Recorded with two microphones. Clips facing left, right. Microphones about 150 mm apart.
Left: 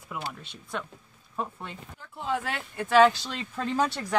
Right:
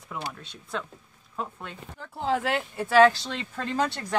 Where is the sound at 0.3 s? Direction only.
5° left (ahead or behind).